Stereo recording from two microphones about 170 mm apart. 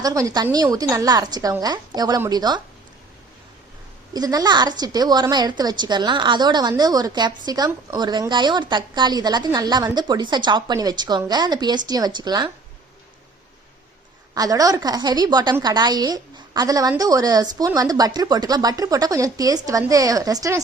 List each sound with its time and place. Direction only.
0.0 s a woman's voice: 20° right (ahead or behind)
4.1 s a woman's voice: 25° right (ahead or behind)
14.3 s a woman's voice: 20° right (ahead or behind)